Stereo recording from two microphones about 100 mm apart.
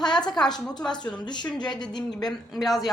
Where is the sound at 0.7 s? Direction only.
45° left (ahead or behind).